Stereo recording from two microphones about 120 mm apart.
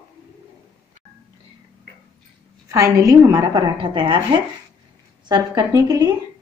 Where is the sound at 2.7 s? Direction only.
25° right (ahead or behind).